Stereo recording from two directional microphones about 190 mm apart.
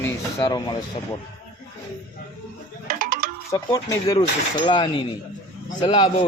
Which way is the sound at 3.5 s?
20° left (ahead or behind).